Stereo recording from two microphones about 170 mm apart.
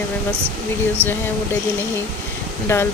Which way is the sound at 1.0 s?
15° right (ahead or behind).